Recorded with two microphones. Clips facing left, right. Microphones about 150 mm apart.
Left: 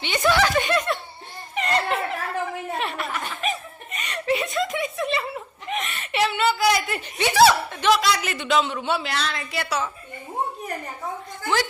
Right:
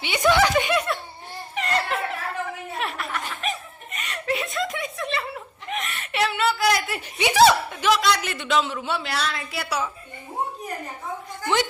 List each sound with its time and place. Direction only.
0.0 s speech: 10° right (ahead or behind)
0.5 s laughter: 10° right (ahead or behind)
2.7 s snicker: centre (ahead or behind)
7.2 s a sound: 15° right (ahead or behind)
11.4 s speech: 20° right (ahead or behind)